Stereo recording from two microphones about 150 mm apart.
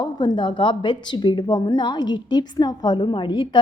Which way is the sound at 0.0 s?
30° left (ahead or behind).